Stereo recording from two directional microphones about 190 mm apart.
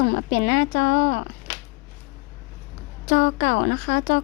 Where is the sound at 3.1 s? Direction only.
55° left (ahead or behind).